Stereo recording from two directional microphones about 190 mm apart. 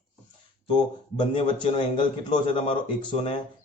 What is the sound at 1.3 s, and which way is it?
A man's voice, 25° left (ahead or behind).